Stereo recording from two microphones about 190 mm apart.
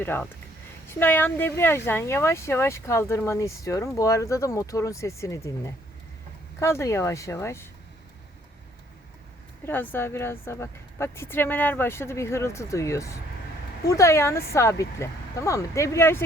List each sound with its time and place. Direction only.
0.0 s speech: 10° left (ahead or behind)
9.6 s speech: 10° left (ahead or behind)